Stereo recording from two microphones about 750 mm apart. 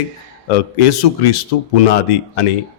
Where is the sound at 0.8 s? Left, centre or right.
Left.